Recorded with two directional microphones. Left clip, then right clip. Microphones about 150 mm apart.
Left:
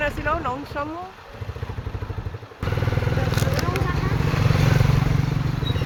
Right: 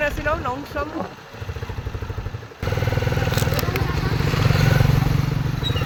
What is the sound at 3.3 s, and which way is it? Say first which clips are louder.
Vehicle: right 1 dB; 60° right (ahead or behind).